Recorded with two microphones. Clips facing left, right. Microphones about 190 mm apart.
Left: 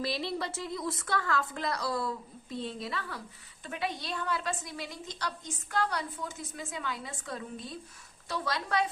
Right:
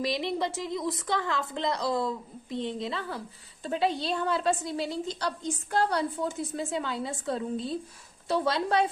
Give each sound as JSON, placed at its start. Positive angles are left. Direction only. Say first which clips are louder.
{"t": 0.0, "sound": "a woman's voice", "louder": "right 4 dB", "side_deg": -20}